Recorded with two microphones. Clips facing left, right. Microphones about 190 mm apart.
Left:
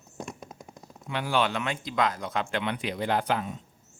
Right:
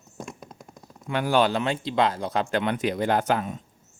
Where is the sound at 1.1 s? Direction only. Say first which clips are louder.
Right 5 dB; 45° right (ahead or behind).